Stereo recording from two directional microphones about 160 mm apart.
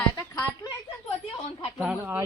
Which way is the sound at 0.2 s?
20° left (ahead or behind).